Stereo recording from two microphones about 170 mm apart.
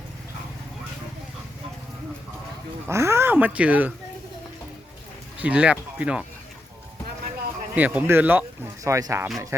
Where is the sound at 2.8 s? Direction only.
15° right (ahead or behind).